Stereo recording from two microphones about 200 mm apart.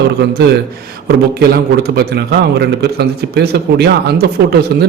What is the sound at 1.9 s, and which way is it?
A man's voice, 55° right (ahead or behind).